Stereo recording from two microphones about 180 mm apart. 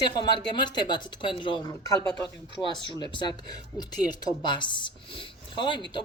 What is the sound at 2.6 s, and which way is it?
Speech, centre (ahead or behind).